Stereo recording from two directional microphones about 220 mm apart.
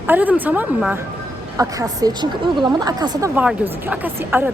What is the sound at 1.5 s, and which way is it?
A woman's voice, 15° right (ahead or behind).